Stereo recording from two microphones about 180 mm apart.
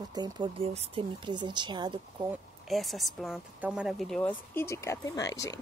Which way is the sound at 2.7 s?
Centre (ahead or behind).